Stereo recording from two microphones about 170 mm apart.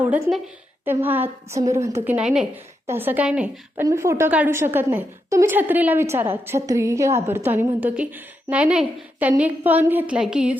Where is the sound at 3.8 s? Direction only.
15° right (ahead or behind).